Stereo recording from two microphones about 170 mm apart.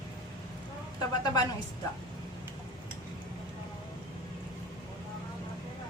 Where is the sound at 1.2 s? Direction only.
25° left (ahead or behind).